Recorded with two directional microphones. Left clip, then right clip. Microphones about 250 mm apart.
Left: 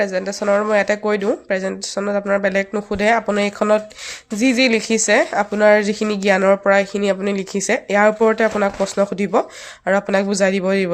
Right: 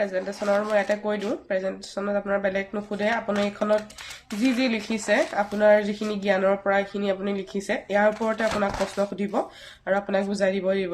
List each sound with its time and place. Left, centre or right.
0.0 s speech: left